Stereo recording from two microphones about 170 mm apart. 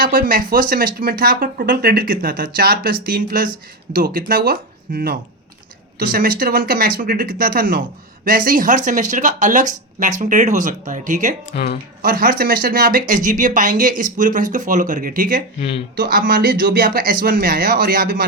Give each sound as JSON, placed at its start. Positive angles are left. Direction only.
{"t": 0.0, "sound": "speech", "side_deg": -55}
{"t": 11.5, "sound": "speech", "side_deg": 75}
{"t": 12.0, "sound": "speech", "side_deg": -60}